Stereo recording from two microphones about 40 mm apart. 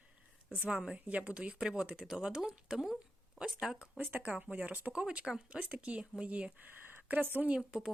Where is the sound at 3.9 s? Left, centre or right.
Right.